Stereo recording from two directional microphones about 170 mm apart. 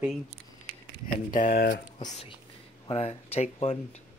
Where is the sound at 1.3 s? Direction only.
55° left (ahead or behind).